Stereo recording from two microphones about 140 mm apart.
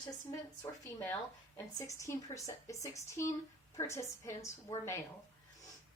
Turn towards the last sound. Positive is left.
turn(degrees=20)  # may be behind; listen again after turning